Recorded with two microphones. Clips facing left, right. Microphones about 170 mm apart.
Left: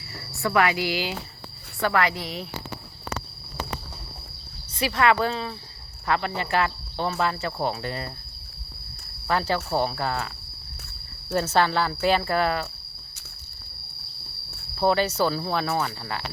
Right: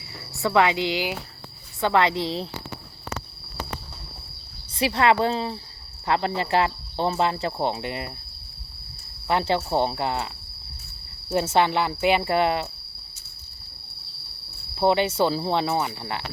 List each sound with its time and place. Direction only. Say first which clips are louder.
0.1 s speech: right 2 dB; 20° right (ahead or behind)
4.8 s speech: right 1 dB; 25° right (ahead or behind)
9.2 s speech: right 2 dB; 25° right (ahead or behind)
11.3 s speech: right 1 dB; 20° right (ahead or behind)
14.8 s speech: right 1 dB; 20° right (ahead or behind)